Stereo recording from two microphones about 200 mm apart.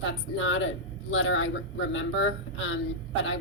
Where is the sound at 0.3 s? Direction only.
70° left (ahead or behind).